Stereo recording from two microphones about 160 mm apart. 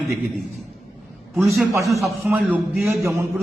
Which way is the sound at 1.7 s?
20° right (ahead or behind).